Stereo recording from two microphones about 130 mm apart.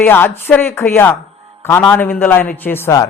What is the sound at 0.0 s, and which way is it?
A man's voice, 15° left (ahead or behind).